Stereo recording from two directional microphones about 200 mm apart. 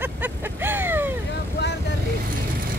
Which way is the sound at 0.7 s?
10° right (ahead or behind).